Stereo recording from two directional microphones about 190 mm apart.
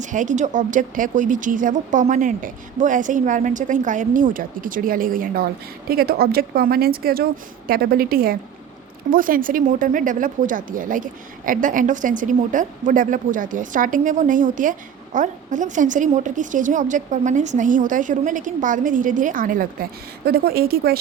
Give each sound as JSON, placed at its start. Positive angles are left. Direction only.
{"t": 0.0, "sound": "speech", "side_deg": -40}